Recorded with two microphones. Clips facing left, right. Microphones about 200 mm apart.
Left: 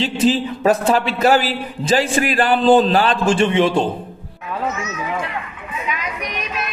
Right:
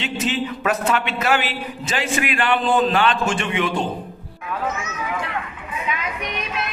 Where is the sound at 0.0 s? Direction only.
30° left (ahead or behind).